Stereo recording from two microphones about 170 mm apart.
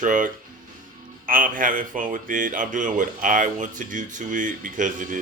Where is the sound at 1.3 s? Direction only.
55° right (ahead or behind).